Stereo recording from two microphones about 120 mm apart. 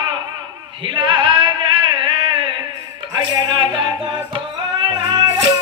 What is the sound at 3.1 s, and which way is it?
Speech, 40° right (ahead or behind).